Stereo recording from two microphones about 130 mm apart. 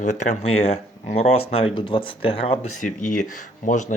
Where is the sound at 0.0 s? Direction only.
70° left (ahead or behind).